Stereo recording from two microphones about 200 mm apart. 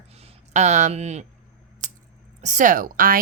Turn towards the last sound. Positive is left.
turn(degrees=-45)  # may be behind; listen again after turning